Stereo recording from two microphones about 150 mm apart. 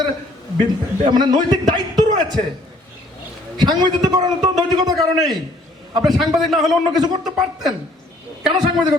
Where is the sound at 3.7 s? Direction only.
30° right (ahead or behind).